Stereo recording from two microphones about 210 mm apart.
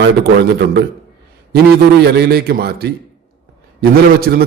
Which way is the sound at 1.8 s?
50° right (ahead or behind).